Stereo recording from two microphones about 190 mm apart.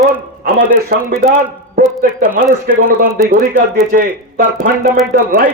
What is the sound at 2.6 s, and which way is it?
A man's voice, 50° right (ahead or behind).